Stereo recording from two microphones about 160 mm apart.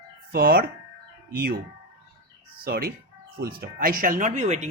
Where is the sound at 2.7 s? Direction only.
75° right (ahead or behind); by 4.7 s 45° right (ahead or behind).